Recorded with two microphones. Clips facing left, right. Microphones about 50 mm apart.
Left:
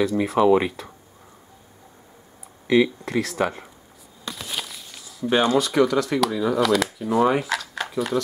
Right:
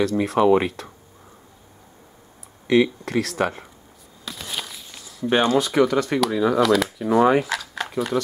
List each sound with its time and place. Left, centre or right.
0.0 s speech: centre
2.7 s speech: centre
4.2 s a sound: centre